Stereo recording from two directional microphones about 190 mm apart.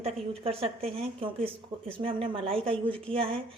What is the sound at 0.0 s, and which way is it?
A woman's voice, 30° right (ahead or behind).